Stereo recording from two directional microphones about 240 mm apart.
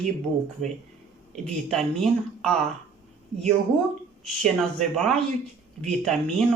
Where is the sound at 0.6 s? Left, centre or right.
Right.